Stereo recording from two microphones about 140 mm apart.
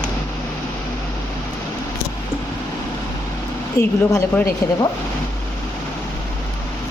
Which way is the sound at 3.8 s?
20° left (ahead or behind).